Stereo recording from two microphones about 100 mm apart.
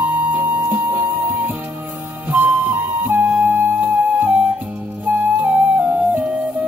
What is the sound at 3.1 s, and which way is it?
Music, 20° right (ahead or behind).